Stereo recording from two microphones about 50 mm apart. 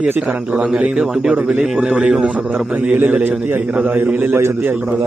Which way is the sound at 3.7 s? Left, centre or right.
Right.